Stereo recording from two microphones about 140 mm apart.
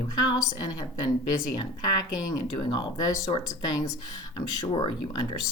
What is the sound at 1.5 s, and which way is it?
Speech, 30° left (ahead or behind).